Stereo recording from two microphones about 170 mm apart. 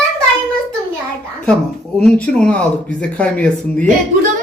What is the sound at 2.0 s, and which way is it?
Speech, 5° left (ahead or behind).